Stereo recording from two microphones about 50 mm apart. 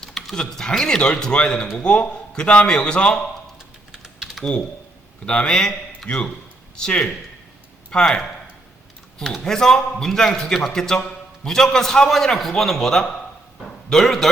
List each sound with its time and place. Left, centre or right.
0.0 s a man's voice: centre
4.5 s a man's voice: left
9.4 s a man's voice: centre
13.7 s dog: centre